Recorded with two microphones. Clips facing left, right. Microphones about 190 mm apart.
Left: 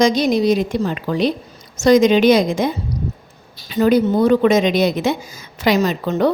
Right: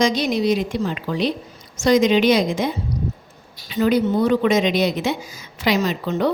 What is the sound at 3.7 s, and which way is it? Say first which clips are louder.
Speech: left 3 dB; 45° left (ahead or behind).